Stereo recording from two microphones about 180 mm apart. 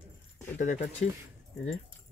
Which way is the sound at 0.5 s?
40° left (ahead or behind).